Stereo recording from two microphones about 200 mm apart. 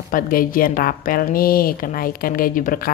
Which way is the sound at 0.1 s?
45° left (ahead or behind).